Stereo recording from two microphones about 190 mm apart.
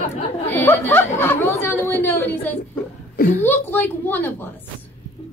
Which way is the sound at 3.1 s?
50° left (ahead or behind).